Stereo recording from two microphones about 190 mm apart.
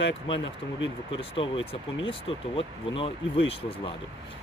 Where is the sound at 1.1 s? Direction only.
25° left (ahead or behind).